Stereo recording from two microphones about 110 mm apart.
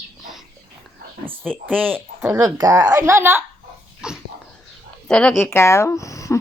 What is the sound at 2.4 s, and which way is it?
Speech, 35° right (ahead or behind).